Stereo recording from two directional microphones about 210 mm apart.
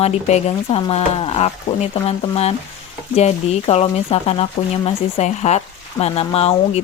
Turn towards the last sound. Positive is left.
turn(degrees=30)  # may be behind; listen again after turning